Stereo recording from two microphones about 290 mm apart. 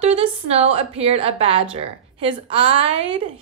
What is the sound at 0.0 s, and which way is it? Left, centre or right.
A woman's voice, right.